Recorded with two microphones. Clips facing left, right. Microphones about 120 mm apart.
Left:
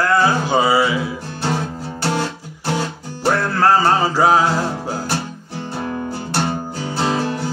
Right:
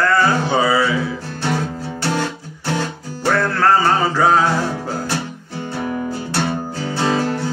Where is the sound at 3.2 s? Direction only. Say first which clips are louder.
Even; 20° left (ahead or behind).